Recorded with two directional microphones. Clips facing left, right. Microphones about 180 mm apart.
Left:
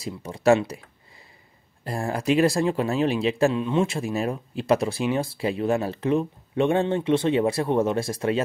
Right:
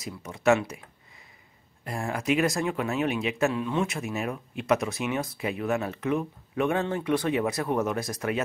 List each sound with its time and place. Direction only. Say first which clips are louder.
0.0 s speech: left 4 dB; 30° left (ahead or behind)
1.9 s speech: left 3 dB; 35° left (ahead or behind)